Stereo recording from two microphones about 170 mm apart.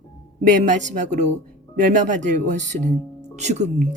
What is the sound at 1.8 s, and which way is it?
A woman's voice, 50° right (ahead or behind).